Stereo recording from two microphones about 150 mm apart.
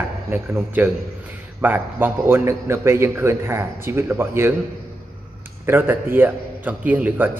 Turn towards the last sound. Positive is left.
turn(degrees=-10)  # may be behind; listen again after turning